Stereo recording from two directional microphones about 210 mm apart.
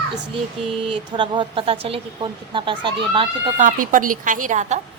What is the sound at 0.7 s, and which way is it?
Speech, 25° right (ahead or behind).